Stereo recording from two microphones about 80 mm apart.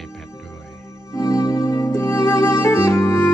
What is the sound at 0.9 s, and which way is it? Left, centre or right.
Music, left.